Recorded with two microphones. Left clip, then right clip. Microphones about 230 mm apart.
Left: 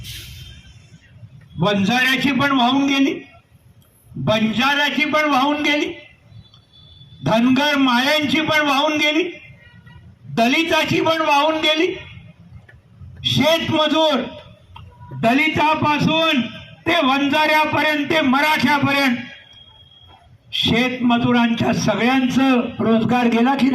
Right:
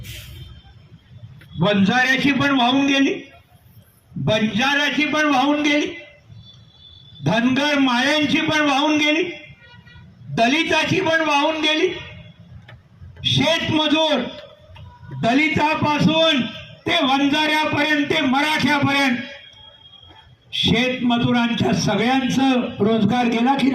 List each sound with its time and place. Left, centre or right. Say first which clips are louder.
1.5 s a man's voice: even; centre
1.9 s a man's voice: even; left
4.3 s a man's voice: left 1 dB; left
7.3 s a man's voice: left 2 dB; left
10.3 s a man's voice: left 1 dB; left
13.2 s a man's voice: left 2 dB; left
15.2 s a man's voice: left 2 dB; left
20.5 s a man's voice: left 1 dB; left